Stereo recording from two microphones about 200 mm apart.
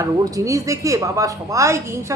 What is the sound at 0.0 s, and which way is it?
A woman's voice, 15° right (ahead or behind).